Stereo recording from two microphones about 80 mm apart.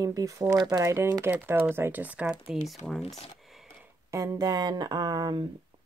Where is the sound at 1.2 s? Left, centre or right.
Right.